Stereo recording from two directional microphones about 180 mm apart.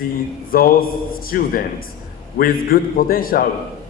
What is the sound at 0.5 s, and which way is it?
Speech, 55° left (ahead or behind).